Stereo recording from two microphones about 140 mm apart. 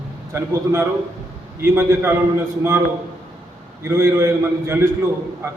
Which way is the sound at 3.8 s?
20° right (ahead or behind).